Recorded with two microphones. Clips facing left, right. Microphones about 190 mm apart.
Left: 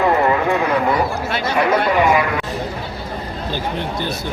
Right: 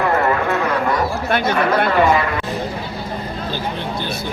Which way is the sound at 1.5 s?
10° left (ahead or behind).